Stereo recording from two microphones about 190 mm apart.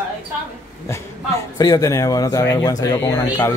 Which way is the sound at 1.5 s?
20° left (ahead or behind).